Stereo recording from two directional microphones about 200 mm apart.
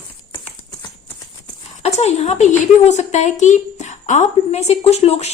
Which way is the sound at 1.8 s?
35° left (ahead or behind).